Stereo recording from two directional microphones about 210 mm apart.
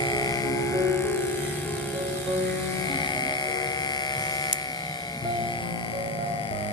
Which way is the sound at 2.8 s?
20° left (ahead or behind).